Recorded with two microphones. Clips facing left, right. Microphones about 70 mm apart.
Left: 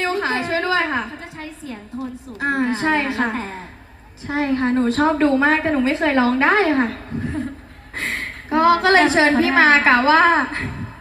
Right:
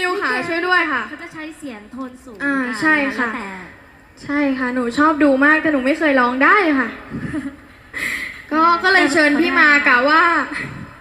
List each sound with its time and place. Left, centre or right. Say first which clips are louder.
0.0 s a woman's voice: right 2 dB; right